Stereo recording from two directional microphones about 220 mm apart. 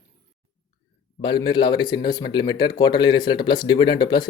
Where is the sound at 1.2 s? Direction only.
20° left (ahead or behind).